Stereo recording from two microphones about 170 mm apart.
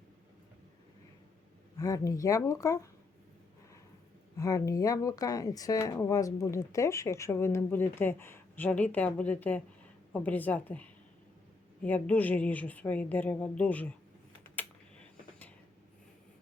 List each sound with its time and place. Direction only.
1.8 s speech: 20° left (ahead or behind)
4.4 s speech: 20° left (ahead or behind)
14.4 s typing: 10° left (ahead or behind)